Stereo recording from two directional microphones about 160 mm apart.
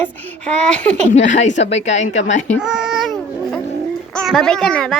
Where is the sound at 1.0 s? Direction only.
50° left (ahead or behind).